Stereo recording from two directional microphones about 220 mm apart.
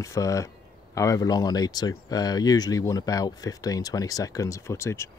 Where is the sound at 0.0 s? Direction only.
15° left (ahead or behind).